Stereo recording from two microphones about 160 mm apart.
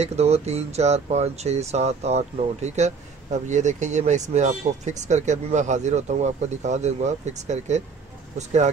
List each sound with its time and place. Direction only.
0.0 s speech: 40° right (ahead or behind)